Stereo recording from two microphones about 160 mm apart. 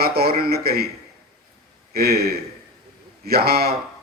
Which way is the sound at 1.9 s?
75° right (ahead or behind).